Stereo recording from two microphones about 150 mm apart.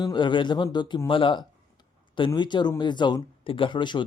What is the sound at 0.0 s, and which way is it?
A man's voice, 30° left (ahead or behind).